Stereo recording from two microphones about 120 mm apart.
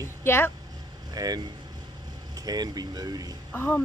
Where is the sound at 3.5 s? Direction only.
15° left (ahead or behind).